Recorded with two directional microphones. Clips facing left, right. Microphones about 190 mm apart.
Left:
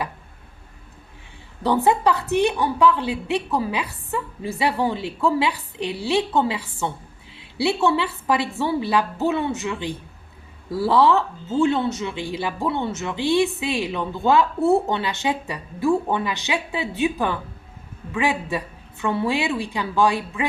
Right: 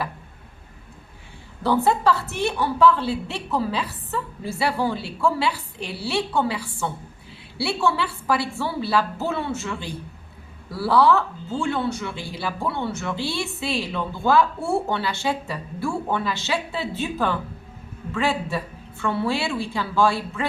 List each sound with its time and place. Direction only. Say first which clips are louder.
1.6 s a woman's voice: left 1 dB; 15° left (ahead or behind)